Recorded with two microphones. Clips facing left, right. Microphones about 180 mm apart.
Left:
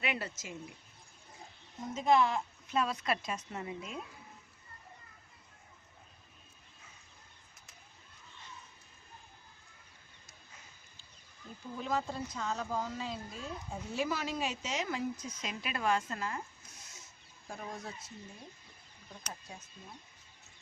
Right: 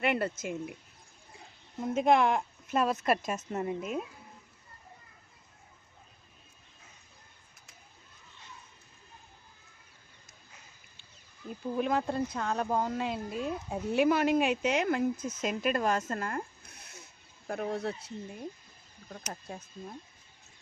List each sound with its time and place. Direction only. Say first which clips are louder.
0.0 s speech: right 8 dB; 55° right (ahead or behind)
1.8 s a woman's voice: right 3 dB; 55° right (ahead or behind)
11.8 s speech: right 6 dB; 60° right (ahead or behind)
19.3 s a woman's voice: right 6 dB; 55° right (ahead or behind)